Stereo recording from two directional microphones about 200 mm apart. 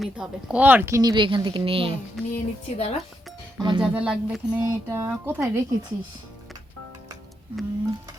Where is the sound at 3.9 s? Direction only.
5° right (ahead or behind).